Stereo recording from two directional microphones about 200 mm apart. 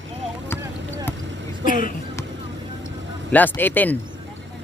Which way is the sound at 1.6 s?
40° left (ahead or behind).